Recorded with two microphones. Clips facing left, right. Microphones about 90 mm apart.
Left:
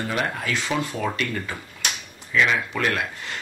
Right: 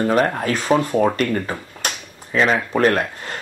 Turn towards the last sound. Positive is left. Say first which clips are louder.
# right 7 dB
turn(degrees=-40)  # may be behind; listen again after turning